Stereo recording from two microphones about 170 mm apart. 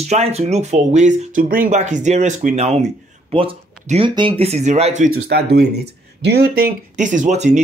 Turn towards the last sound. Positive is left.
turn(degrees=-45)  # may be behind; listen again after turning